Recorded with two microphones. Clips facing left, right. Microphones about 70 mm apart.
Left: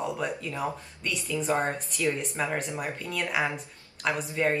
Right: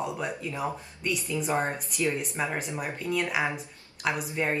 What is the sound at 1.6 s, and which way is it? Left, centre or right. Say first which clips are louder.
A woman's voice: even; centre.